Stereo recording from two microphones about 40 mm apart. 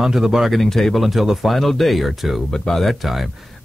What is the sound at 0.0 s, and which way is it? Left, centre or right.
Speech, centre.